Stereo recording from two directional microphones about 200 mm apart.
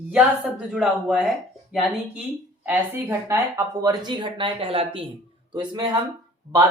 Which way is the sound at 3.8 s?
20° right (ahead or behind).